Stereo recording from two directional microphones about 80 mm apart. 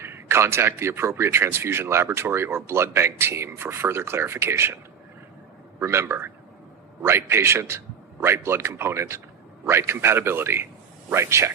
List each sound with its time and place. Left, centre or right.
0.0 s speech: right
5.8 s speech: right